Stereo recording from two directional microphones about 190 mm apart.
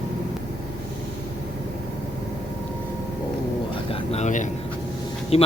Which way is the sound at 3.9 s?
35° left (ahead or behind).